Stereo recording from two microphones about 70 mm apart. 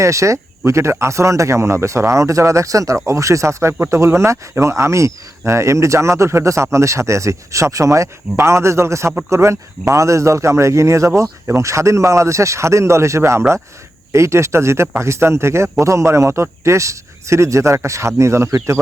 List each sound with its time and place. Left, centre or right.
0.0 s speech: right